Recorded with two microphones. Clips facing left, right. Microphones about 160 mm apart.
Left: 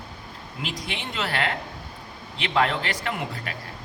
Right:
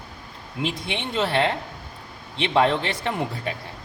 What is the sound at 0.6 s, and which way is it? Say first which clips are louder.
Speech: right 5 dB; 25° right (ahead or behind).